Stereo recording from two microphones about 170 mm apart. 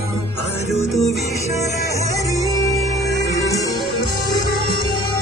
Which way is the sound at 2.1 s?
20° left (ahead or behind).